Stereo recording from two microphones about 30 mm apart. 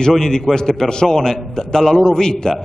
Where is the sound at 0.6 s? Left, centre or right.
Left.